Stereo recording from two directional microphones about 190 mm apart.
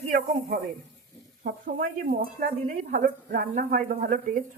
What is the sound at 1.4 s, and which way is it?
A woman's voice, 50° right (ahead or behind).